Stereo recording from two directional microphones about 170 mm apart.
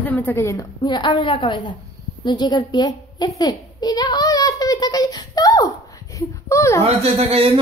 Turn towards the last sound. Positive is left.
turn(degrees=-35)  # may be behind; listen again after turning